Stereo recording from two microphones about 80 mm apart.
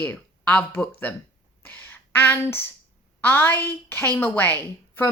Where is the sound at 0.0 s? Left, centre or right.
Left.